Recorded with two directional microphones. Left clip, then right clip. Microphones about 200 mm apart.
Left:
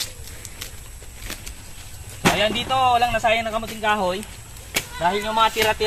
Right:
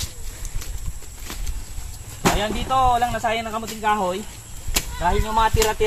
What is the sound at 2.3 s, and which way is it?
Speech, 5° left (ahead or behind).